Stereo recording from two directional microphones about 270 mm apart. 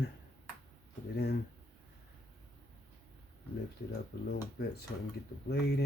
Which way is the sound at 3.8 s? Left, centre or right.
Left.